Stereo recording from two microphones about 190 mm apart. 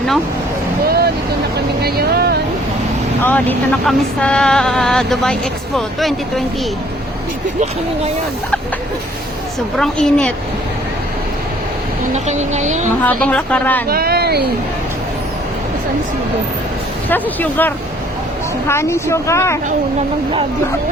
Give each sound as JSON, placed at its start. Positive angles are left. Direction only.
{"t": 0.9, "sound": "vehicle", "side_deg": -55}
{"t": 1.8, "sound": "speech", "side_deg": -55}
{"t": 3.2, "sound": "speech", "side_deg": 10}
{"t": 9.7, "sound": "speech", "side_deg": 5}
{"t": 12.1, "sound": "speech", "side_deg": -35}
{"t": 13.0, "sound": "speech", "side_deg": 10}
{"t": 13.8, "sound": "speech", "side_deg": -50}
{"t": 17.1, "sound": "speech", "side_deg": 10}